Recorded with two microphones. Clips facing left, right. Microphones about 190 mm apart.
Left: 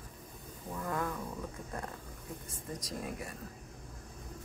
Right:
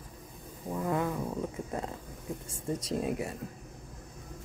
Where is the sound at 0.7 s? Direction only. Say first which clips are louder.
Right 6 dB; 20° right (ahead or behind).